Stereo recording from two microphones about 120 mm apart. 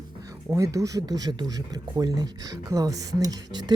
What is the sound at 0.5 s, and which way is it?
Speech, 25° right (ahead or behind).